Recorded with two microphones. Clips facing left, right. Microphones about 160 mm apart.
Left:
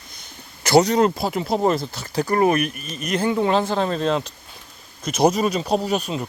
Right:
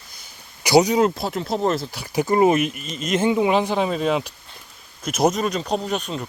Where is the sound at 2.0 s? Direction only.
15° right (ahead or behind).